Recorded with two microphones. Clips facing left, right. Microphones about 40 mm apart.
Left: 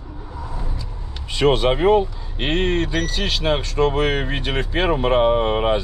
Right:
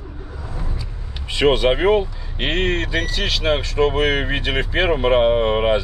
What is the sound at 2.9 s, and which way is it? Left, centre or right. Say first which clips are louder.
Speech: right 1 dB; right.